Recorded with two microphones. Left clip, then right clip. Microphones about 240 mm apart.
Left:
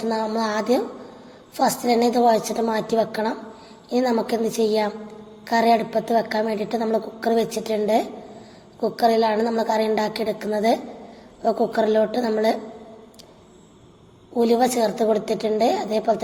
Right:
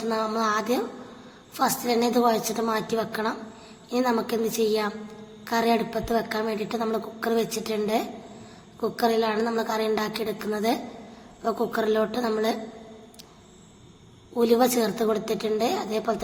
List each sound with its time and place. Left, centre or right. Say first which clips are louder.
0.1 s a woman's voice: even; centre
14.3 s a woman's voice: left 2 dB; centre